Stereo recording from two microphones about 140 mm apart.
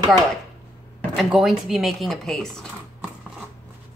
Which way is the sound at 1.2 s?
Centre (ahead or behind).